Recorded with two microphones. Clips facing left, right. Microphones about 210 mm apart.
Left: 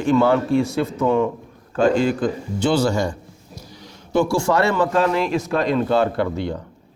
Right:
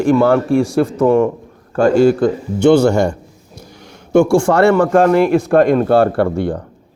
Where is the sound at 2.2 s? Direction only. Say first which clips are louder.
Right 9 dB; 60° right (ahead or behind).